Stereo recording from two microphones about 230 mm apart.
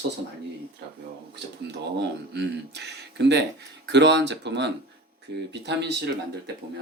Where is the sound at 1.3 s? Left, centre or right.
Right.